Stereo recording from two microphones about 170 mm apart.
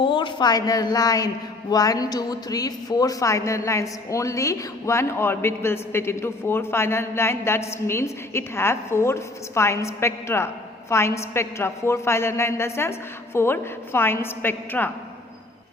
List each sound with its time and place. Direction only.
0.0 s a woman's voice: 30° left (ahead or behind); by 14.8 s 10° left (ahead or behind)